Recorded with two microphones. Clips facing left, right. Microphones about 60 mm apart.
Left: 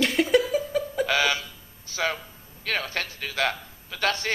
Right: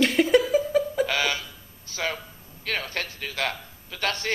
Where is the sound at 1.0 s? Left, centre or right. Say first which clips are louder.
Left 2 dB; left.